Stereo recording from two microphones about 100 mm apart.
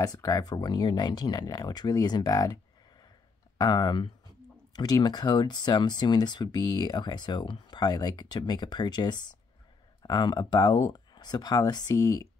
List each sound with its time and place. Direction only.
0.0 s speech: 40° left (ahead or behind)